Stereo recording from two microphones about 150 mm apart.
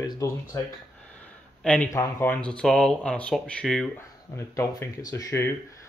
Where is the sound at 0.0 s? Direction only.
25° left (ahead or behind).